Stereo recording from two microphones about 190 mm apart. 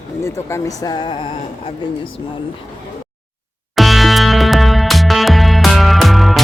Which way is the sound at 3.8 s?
Centre (ahead or behind).